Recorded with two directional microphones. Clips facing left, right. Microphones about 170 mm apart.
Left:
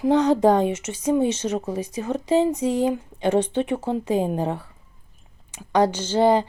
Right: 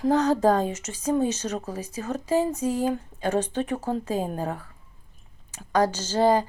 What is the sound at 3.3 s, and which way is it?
Speech, 25° left (ahead or behind).